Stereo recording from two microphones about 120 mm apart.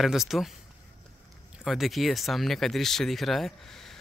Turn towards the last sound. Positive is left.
turn(degrees=5)  # may be behind; listen again after turning